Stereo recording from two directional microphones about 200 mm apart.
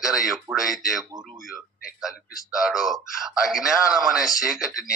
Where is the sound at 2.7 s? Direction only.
Centre (ahead or behind).